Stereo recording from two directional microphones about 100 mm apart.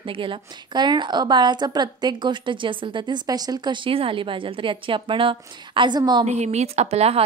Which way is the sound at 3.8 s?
65° right (ahead or behind).